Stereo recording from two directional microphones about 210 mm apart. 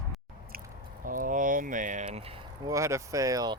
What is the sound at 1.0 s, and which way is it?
Speech, 40° right (ahead or behind).